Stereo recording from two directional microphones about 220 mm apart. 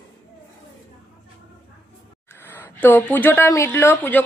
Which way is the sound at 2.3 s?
10° left (ahead or behind).